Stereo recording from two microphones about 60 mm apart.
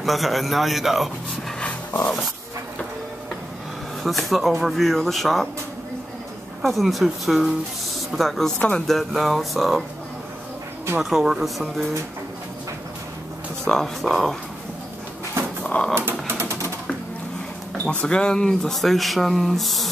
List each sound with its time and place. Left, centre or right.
0.0 s speech: centre
1.6 s a sound: left
4.0 s speech: centre
6.6 s speech: centre
8.5 s speech: left
8.8 s speech: centre
11.0 s speech: centre
13.7 s speech: centre
15.6 s a sound: centre
16.1 s typing: right
18.0 s speech: centre